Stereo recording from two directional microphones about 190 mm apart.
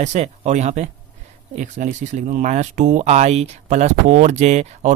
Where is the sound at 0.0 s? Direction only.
35° right (ahead or behind).